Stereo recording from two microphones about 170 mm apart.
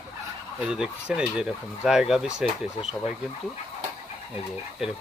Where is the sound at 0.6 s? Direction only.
5° right (ahead or behind).